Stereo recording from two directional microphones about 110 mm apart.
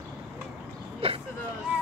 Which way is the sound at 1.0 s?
60° right (ahead or behind).